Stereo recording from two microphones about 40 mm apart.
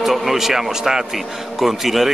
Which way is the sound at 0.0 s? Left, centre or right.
Centre.